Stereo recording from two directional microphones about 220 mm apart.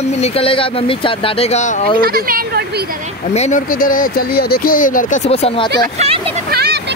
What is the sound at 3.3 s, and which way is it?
Speech, 30° left (ahead or behind).